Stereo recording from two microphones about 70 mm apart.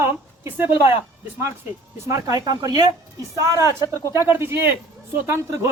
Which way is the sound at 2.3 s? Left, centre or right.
Right.